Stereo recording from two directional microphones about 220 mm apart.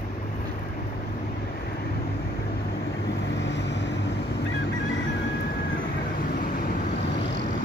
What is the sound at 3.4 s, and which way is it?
Vehicle, 50° left (ahead or behind).